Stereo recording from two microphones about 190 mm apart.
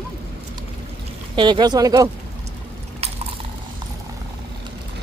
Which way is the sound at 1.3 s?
25° right (ahead or behind).